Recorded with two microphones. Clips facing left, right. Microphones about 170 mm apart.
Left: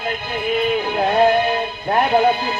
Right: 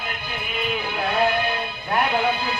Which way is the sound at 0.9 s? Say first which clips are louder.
Left 7 dB; 40° left (ahead or behind).